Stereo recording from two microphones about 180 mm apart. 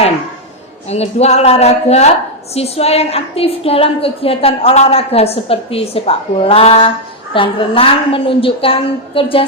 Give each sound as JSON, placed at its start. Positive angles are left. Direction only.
{"t": 0.9, "sound": "a woman's voice", "side_deg": 35}